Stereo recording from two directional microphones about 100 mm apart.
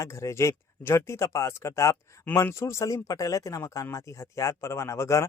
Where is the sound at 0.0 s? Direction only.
30° left (ahead or behind).